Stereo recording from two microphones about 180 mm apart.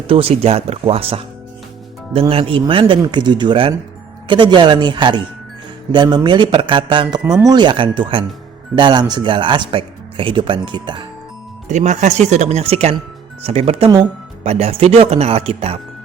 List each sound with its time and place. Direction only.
0.1 s speech: 30° right (ahead or behind)
2.3 s speech: 30° right (ahead or behind)
11.7 s speech: 40° right (ahead or behind)